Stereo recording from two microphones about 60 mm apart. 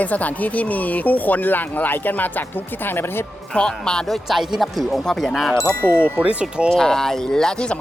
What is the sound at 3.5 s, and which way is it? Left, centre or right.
Speech, centre.